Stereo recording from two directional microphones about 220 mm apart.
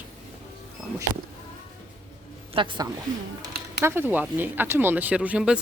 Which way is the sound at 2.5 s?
25° right (ahead or behind).